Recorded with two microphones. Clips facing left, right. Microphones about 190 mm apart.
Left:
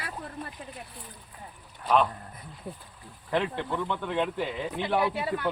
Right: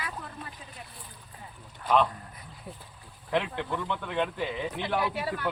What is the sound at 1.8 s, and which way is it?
Speech, 5° left (ahead or behind).